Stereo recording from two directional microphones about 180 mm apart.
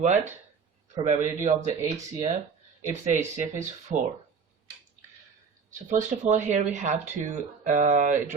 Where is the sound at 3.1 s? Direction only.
40° right (ahead or behind).